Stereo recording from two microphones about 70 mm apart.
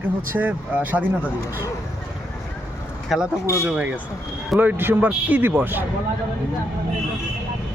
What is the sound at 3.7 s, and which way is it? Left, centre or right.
Speech, right.